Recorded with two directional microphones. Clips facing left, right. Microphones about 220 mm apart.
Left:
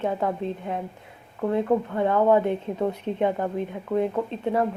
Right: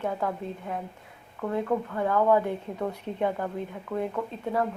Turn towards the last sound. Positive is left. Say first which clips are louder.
# left 4 dB
turn(degrees=25)  # may be behind; listen again after turning